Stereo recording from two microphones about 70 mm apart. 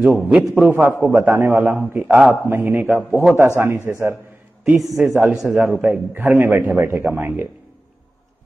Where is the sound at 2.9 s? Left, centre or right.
Centre.